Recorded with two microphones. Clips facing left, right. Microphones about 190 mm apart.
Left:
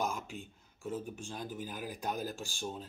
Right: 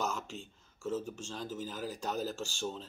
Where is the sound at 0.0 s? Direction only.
10° left (ahead or behind).